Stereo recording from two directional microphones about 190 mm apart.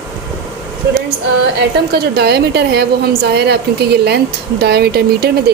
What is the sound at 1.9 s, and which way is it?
A woman's voice, 55° right (ahead or behind).